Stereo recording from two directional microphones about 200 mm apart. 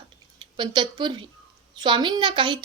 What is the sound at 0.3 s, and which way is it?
A woman's voice, 25° right (ahead or behind).